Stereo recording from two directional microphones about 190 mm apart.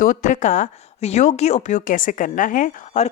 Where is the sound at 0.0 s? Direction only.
45° left (ahead or behind).